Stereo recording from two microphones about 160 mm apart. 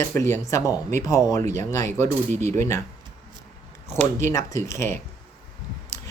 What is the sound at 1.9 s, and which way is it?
Speech, 50° right (ahead or behind).